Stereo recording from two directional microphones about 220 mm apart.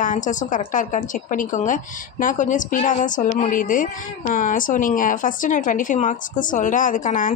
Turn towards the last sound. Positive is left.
turn(degrees=35)  # may be behind; listen again after turning